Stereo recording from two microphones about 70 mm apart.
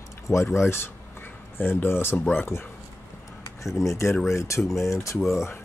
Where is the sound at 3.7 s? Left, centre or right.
Left.